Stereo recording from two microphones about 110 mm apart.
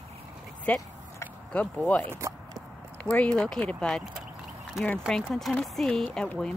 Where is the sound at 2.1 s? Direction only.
30° right (ahead or behind).